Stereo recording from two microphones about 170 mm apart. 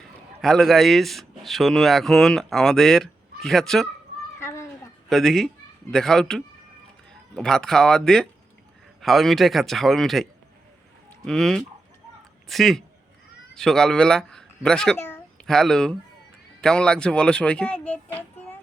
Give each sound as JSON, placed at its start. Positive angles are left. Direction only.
{"t": 0.4, "sound": "speech", "side_deg": 0}
{"t": 4.4, "sound": "children playing", "side_deg": 15}
{"t": 5.0, "sound": "speech", "side_deg": 0}
{"t": 11.3, "sound": "speech", "side_deg": 5}
{"t": 15.4, "sound": "speech", "side_deg": 5}